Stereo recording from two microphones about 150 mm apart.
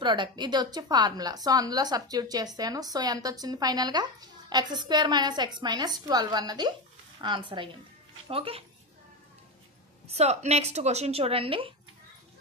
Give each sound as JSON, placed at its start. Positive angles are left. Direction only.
{"t": 0.0, "sound": "a woman's voice", "side_deg": -30}
{"t": 10.1, "sound": "a woman's voice", "side_deg": -45}